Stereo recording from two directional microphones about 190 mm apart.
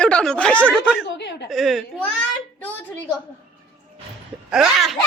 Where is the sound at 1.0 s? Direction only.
65° left (ahead or behind).